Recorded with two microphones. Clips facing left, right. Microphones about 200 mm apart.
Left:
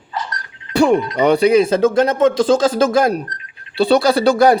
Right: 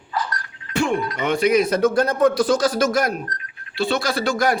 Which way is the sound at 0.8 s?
35° left (ahead or behind).